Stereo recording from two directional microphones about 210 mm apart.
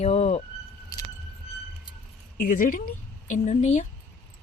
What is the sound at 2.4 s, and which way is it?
A woman's voice, 40° left (ahead or behind).